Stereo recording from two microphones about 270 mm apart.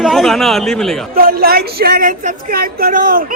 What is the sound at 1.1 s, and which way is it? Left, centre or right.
Speech, right.